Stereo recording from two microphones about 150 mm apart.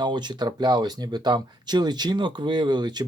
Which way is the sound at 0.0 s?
30° right (ahead or behind).